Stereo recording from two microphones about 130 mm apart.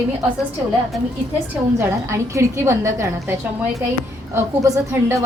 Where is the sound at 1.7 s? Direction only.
20° right (ahead or behind).